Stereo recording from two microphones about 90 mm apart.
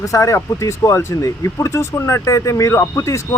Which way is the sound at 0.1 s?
35° left (ahead or behind).